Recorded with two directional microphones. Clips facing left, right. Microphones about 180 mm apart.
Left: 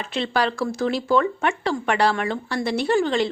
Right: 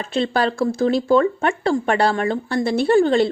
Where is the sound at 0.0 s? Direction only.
35° right (ahead or behind).